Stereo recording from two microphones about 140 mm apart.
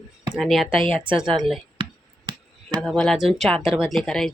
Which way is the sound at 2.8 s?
5° left (ahead or behind).